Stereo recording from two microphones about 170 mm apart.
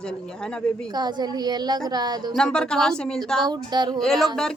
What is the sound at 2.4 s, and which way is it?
A woman's voice, 5° left (ahead or behind).